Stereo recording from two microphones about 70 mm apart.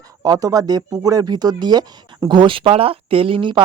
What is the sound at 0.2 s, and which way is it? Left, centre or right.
Speech, right.